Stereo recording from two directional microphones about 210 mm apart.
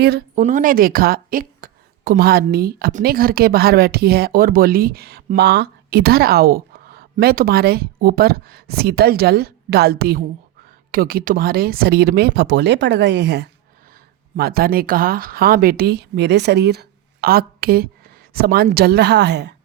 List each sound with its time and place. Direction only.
0.0 s speech: 50° right (ahead or behind)